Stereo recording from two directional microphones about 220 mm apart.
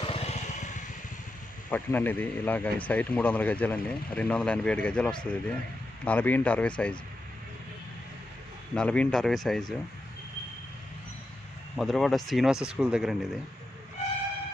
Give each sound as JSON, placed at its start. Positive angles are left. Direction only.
{"t": 0.0, "sound": "vehicle", "side_deg": 25}
{"t": 1.7, "sound": "a man's voice", "side_deg": 10}
{"t": 8.7, "sound": "speech", "side_deg": 5}
{"t": 11.8, "sound": "speech", "side_deg": 0}